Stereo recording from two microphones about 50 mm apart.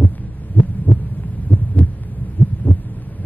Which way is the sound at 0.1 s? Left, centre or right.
Left.